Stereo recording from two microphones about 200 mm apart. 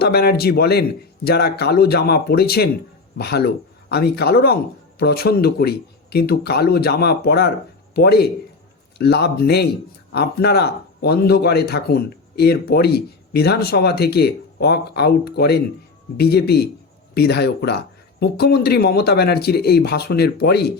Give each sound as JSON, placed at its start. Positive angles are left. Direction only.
{"t": 0.0, "sound": "speech", "side_deg": 50}